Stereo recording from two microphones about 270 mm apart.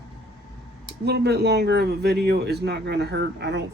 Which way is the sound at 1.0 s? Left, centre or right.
Right.